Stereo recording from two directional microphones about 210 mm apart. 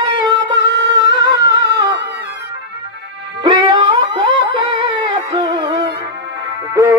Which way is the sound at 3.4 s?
20° right (ahead or behind).